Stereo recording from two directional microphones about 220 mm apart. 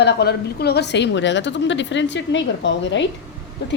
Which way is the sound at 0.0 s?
50° left (ahead or behind).